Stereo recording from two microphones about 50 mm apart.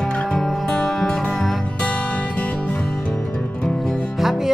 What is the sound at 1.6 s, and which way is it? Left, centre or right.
Music, left.